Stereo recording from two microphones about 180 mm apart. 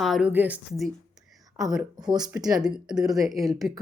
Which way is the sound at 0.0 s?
Centre (ahead or behind).